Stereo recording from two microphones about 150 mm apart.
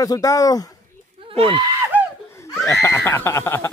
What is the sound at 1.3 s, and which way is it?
Speech, 35° right (ahead or behind).